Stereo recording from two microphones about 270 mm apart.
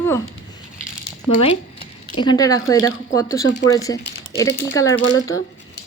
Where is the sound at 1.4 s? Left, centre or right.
Left.